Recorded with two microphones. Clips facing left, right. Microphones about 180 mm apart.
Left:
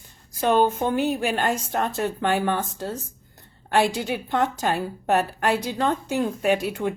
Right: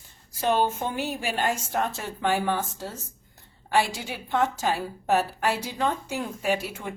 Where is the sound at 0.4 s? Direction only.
50° left (ahead or behind).